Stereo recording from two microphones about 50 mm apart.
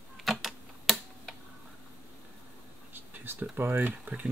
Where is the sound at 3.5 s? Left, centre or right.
Right.